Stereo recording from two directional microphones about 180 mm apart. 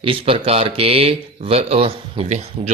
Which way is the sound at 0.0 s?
30° right (ahead or behind).